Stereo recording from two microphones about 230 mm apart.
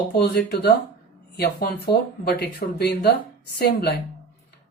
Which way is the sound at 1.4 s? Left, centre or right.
Left.